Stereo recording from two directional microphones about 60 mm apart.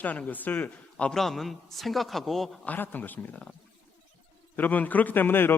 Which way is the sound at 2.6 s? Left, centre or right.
Left.